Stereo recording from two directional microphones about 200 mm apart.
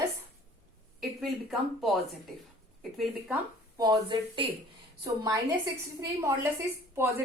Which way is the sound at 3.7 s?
20° right (ahead or behind).